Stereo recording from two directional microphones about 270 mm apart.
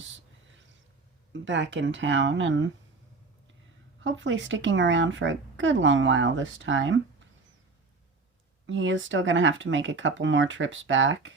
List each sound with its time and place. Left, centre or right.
1.3 s speech: right
4.0 s speech: right
8.6 s speech: right